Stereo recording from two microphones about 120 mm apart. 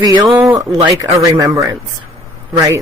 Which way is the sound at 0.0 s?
35° right (ahead or behind).